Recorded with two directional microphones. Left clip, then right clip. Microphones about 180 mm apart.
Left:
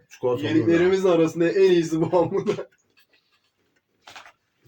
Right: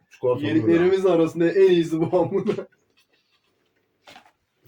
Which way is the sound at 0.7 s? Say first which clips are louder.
Right 1 dB; 5° left (ahead or behind).